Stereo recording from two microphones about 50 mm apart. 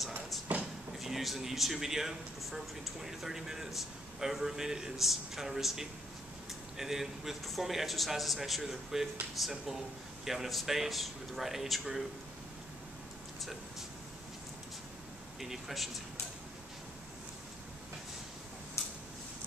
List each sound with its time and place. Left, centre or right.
0.5 s a sound: right
0.9 s a man's voice: centre
13.4 s vehicle: centre
15.4 s speech: centre